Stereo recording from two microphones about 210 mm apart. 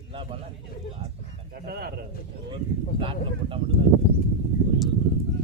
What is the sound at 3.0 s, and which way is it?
Speech, 25° right (ahead or behind).